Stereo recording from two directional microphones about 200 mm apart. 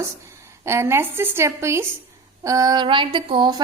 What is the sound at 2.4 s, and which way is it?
Female singing, 15° right (ahead or behind).